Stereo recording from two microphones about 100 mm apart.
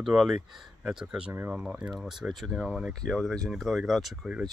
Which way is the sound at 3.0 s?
5° left (ahead or behind).